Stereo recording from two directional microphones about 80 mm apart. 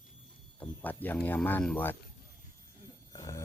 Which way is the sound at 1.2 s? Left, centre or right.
Left.